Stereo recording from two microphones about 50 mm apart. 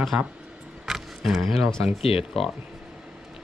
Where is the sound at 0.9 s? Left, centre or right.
Centre.